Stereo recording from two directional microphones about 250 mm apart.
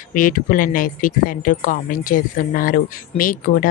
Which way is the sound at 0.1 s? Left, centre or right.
Left.